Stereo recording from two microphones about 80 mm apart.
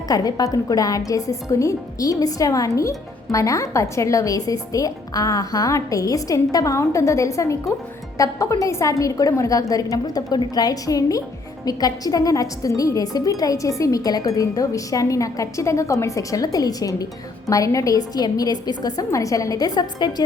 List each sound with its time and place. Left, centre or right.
0.1 s a woman's voice: left